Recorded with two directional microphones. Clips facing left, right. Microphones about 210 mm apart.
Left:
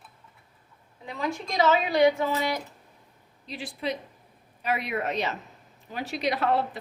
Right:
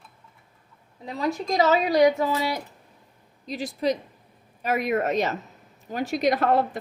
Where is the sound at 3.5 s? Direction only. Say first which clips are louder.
Right 6 dB; 40° right (ahead or behind).